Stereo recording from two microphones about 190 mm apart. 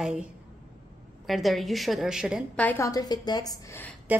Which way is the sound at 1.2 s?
Centre (ahead or behind).